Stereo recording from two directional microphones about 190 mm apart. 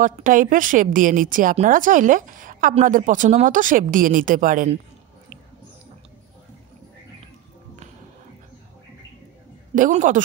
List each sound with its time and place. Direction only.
0.0 s a woman's voice: 45° right (ahead or behind)
9.8 s a woman's voice: 45° right (ahead or behind)